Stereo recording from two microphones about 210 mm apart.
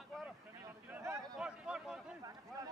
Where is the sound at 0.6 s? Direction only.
10° right (ahead or behind).